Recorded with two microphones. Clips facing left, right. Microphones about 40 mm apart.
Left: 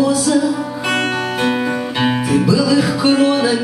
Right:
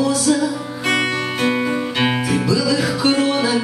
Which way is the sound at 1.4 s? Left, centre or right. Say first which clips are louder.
Left 1 dB; centre.